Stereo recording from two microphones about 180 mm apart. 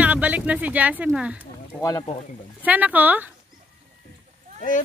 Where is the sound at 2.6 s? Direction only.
10° right (ahead or behind).